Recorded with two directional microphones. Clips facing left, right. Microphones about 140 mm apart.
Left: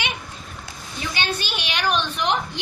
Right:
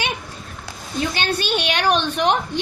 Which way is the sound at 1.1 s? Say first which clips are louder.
Right 2 dB; 50° right (ahead or behind).